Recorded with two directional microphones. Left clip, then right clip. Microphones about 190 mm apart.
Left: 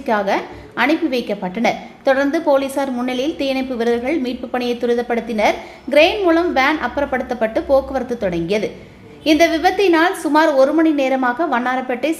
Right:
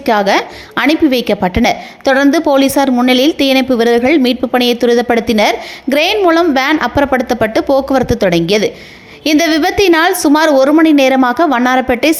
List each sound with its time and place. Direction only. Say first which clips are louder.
0.0 s a woman's voice: right 7 dB; 40° right (ahead or behind)